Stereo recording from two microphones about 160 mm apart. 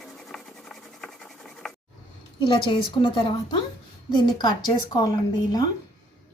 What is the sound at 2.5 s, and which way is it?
A woman's voice, 30° left (ahead or behind).